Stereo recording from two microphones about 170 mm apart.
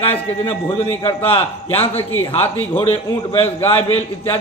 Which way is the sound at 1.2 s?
35° left (ahead or behind).